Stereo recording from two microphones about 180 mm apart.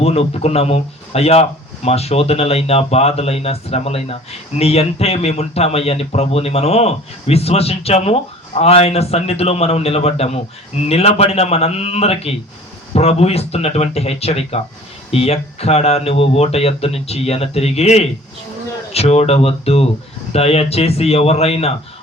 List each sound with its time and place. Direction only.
0.0 s speech: 35° left (ahead or behind)